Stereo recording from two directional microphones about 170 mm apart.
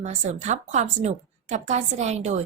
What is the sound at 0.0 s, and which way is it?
A woman's voice, 45° right (ahead or behind).